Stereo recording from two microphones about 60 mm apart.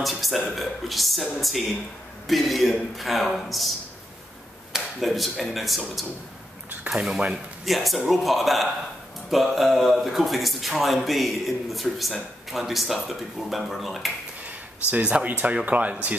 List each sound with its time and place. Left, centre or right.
0.0 s speech: centre
4.7 s speech: centre
6.9 s speech: centre
7.6 s speech: centre
14.4 s speech: right